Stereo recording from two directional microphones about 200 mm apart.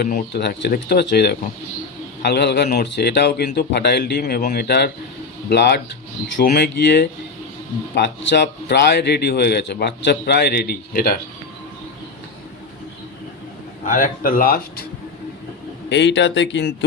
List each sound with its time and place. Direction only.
0.0 s speech: 55° left (ahead or behind)
13.8 s speech: 40° left (ahead or behind)
15.9 s speech: 60° left (ahead or behind)